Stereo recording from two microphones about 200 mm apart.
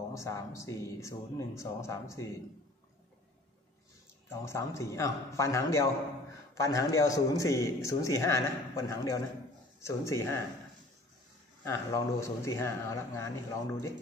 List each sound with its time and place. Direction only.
0.1 s a man's voice: 15° left (ahead or behind)
4.3 s a man's voice: 15° left (ahead or behind)
11.6 s a man's voice: 15° left (ahead or behind)